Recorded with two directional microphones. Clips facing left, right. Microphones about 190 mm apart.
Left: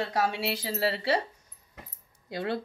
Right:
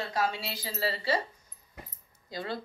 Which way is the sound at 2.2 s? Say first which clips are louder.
Left 5 dB; 60° left (ahead or behind).